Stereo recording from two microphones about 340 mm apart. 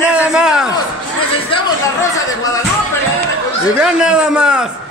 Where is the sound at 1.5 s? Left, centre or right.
Centre.